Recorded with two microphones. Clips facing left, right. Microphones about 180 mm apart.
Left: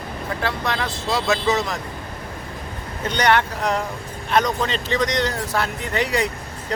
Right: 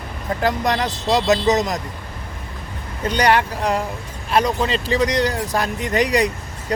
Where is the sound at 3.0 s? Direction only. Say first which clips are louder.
Right 2 dB; 35° right (ahead or behind).